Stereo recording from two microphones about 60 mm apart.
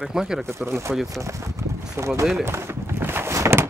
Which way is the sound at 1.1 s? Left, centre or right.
Right.